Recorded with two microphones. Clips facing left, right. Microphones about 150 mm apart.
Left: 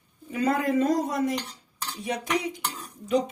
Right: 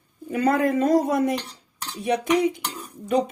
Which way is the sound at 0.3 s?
60° right (ahead or behind).